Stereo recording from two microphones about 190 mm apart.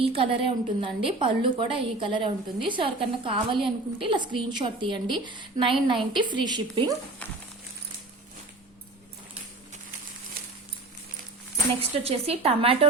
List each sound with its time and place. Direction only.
0.0 s a woman's voice: 30° right (ahead or behind)
11.8 s speech: 30° right (ahead or behind)